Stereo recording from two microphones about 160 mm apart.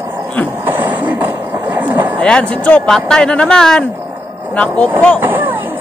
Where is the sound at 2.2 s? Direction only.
5° left (ahead or behind).